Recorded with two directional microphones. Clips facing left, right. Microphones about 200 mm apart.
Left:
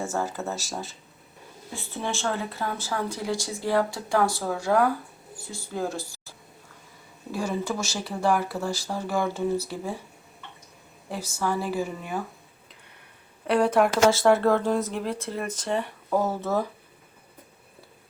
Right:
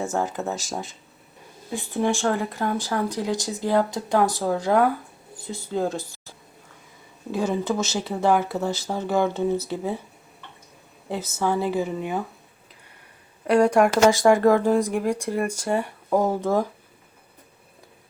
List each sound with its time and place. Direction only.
0.0 s speech: 15° right (ahead or behind)
7.3 s speech: 20° right (ahead or behind)
11.1 s speech: 20° right (ahead or behind)
13.5 s speech: 5° left (ahead or behind)
14.1 s speech: 15° right (ahead or behind)